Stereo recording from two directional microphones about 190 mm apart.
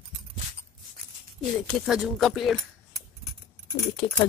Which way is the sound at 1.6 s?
Centre (ahead or behind).